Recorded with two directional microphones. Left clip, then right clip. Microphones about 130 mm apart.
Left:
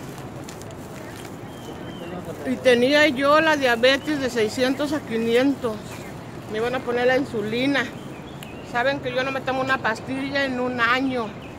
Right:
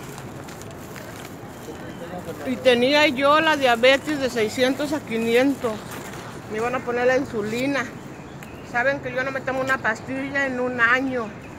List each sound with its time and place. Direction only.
2.4 s speech: 10° left (ahead or behind)
5.1 s speech: 5° right (ahead or behind)
6.5 s speech: 10° left (ahead or behind); by 11.2 s 10° right (ahead or behind)